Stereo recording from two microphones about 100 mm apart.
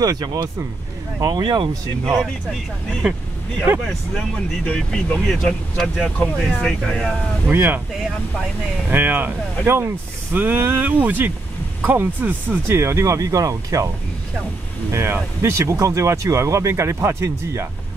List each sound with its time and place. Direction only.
0.0 s speech: 40° right (ahead or behind)
3.0 s speech: 10° right (ahead or behind)
4.6 s speech: 10° left (ahead or behind)
8.9 s speech: 20° right (ahead or behind); by 13.8 s 35° right (ahead or behind)
14.9 s speech: 25° right (ahead or behind)